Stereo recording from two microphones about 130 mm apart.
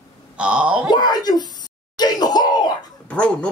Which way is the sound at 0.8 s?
35° left (ahead or behind).